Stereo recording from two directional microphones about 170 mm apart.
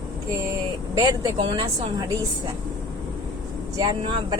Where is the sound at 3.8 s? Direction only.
25° right (ahead or behind).